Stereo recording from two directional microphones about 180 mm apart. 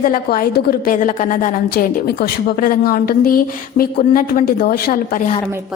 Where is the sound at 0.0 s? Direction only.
50° left (ahead or behind).